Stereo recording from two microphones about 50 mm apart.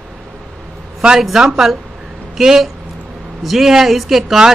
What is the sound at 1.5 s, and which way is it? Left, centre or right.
A man's voice, centre.